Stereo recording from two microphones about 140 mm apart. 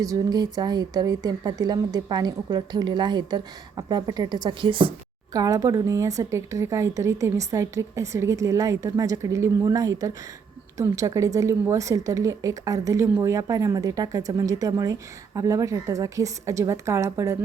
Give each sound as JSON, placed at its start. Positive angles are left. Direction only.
{"t": 0.0, "sound": "speech", "side_deg": -25}
{"t": 5.3, "sound": "speech", "side_deg": -25}